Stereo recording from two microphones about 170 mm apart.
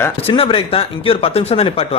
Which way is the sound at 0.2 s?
35° left (ahead or behind).